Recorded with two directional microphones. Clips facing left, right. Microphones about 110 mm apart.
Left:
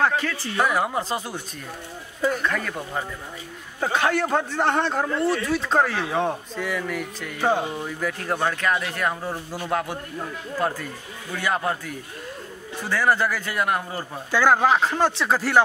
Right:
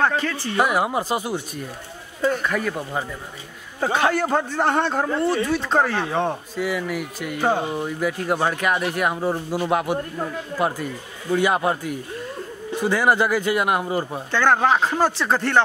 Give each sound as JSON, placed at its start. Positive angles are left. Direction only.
{"t": 0.0, "sound": "speech", "side_deg": 0}
{"t": 0.6, "sound": "speech", "side_deg": -10}
{"t": 2.4, "sound": "speech", "side_deg": -10}
{"t": 14.3, "sound": "speech", "side_deg": 5}